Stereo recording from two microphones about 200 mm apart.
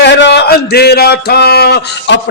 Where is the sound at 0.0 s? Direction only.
60° left (ahead or behind).